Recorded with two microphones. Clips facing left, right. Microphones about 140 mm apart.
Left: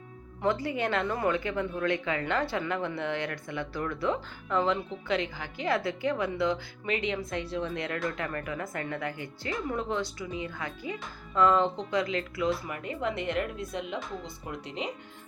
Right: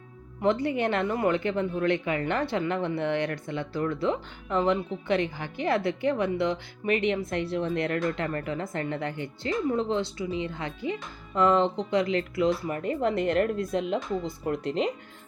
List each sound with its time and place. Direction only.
0.4 s speech: 20° right (ahead or behind); by 13.7 s 45° right (ahead or behind)
13.7 s speech: centre (ahead or behind)
14.3 s speech: 45° right (ahead or behind)
14.6 s speech: centre (ahead or behind)